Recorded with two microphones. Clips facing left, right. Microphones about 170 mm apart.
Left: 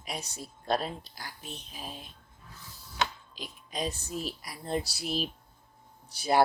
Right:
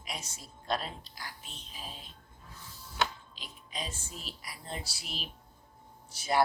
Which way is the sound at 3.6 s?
40° left (ahead or behind).